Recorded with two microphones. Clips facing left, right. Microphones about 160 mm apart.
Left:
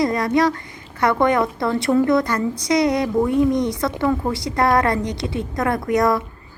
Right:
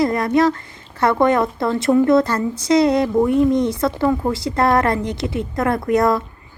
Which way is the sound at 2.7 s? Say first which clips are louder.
Right 4 dB; 20° left (ahead or behind).